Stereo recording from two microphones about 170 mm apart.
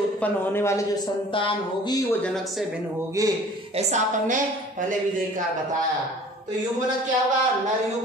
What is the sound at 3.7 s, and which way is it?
Speech, 45° right (ahead or behind).